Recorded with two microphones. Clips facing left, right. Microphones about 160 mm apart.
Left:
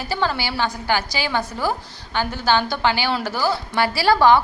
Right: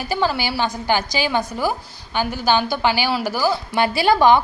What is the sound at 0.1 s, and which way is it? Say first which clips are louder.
A woman's voice: right 2 dB; 15° right (ahead or behind).